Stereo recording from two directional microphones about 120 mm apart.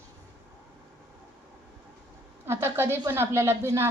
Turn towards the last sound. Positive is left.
turn(degrees=-20)  # may be behind; listen again after turning